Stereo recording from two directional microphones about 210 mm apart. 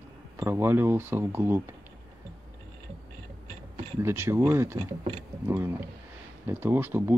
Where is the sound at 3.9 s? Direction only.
10° right (ahead or behind).